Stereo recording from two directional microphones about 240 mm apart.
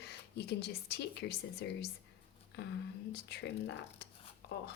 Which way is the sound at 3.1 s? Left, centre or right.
Left.